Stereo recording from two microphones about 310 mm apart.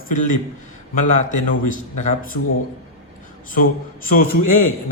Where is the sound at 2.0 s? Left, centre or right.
Left.